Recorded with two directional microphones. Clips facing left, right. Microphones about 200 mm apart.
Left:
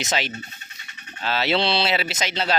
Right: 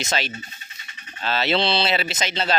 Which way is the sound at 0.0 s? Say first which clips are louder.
Even; 15° left (ahead or behind).